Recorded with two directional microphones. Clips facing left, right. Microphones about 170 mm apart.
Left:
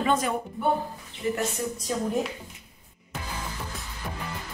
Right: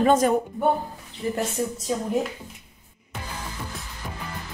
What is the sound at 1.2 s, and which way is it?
Speech, 35° right (ahead or behind).